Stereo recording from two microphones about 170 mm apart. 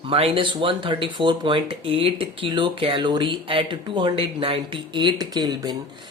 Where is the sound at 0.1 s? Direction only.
35° right (ahead or behind).